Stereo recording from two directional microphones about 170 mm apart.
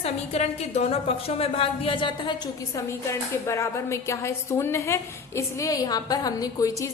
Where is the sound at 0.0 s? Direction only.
40° left (ahead or behind).